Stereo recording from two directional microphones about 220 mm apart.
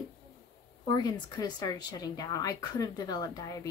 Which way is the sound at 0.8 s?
20° left (ahead or behind).